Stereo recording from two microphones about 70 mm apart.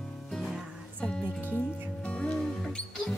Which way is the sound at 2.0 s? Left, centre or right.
Centre.